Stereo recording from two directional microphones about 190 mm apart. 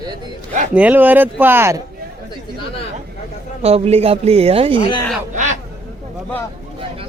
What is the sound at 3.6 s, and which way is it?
A woman's voice, 30° right (ahead or behind).